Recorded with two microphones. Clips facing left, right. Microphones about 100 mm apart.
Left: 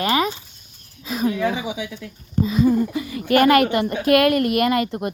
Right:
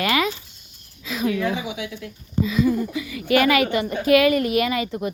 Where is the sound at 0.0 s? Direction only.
35° left (ahead or behind).